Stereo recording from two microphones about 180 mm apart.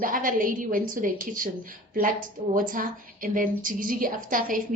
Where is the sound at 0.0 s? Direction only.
50° right (ahead or behind).